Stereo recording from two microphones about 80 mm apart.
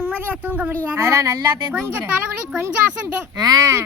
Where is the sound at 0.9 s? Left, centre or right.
Right.